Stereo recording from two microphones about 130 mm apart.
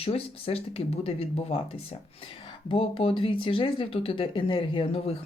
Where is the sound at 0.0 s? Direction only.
50° left (ahead or behind).